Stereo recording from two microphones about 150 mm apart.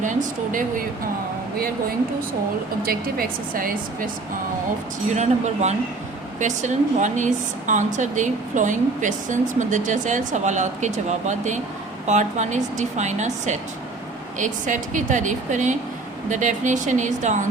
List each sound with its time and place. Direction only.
0.0 s a woman's voice: 55° right (ahead or behind)
2.8 s a woman's voice: 75° right (ahead or behind)
5.1 s a woman's voice: 50° right (ahead or behind)